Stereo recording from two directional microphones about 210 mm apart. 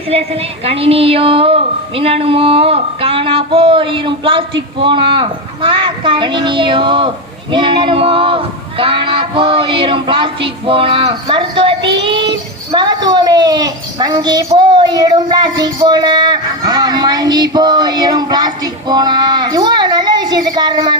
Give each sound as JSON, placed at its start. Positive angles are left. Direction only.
{"t": 0.1, "sound": "speech", "side_deg": -30}